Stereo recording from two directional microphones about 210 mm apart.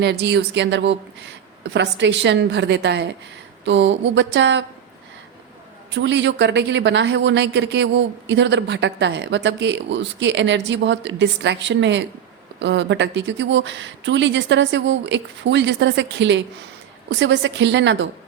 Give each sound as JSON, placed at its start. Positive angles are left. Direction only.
{"t": 0.0, "sound": "a woman's voice", "side_deg": -55}
{"t": 5.9, "sound": "a woman's voice", "side_deg": -55}